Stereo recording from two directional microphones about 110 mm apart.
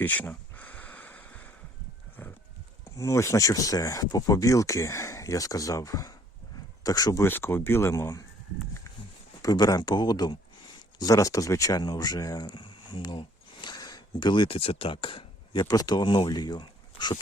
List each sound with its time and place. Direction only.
0.0 s a sound: 15° left (ahead or behind)
2.8 s speech: 25° left (ahead or behind)
7.3 s speech: 20° left (ahead or behind)
9.4 s speech: 35° left (ahead or behind); by 15.6 s 50° left (ahead or behind)
15.6 s speech: 35° left (ahead or behind)